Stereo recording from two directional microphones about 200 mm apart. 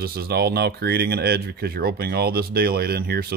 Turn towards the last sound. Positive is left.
turn(degrees=-50)  # may be behind; listen again after turning